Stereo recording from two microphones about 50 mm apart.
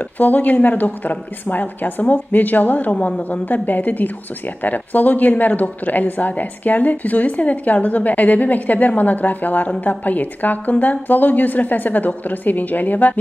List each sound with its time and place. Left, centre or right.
0.2 s a woman's voice: left